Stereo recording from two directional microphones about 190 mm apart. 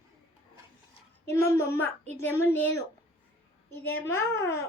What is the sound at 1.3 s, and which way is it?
A woman's voice, 15° left (ahead or behind).